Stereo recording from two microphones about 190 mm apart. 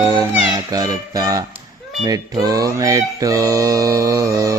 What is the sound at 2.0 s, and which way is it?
Mantra, 20° right (ahead or behind).